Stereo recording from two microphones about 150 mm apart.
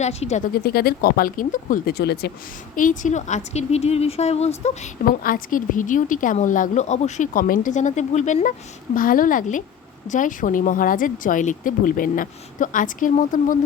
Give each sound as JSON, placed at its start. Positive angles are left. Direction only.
{"t": 0.0, "sound": "a woman's voice", "side_deg": 45}
{"t": 0.6, "sound": "speech", "side_deg": 90}
{"t": 2.7, "sound": "a woman's voice", "side_deg": 60}
{"t": 5.0, "sound": "a woman's voice", "side_deg": 70}
{"t": 9.0, "sound": "a woman's voice", "side_deg": 70}